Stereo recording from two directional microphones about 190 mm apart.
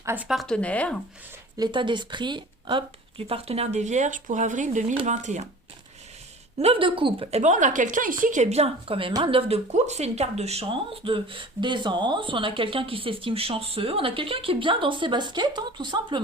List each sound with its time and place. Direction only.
0.0 s speech: 10° right (ahead or behind); by 0.9 s 5° left (ahead or behind)
1.5 s a woman's voice: 25° right (ahead or behind)
6.6 s a woman's voice: 30° right (ahead or behind)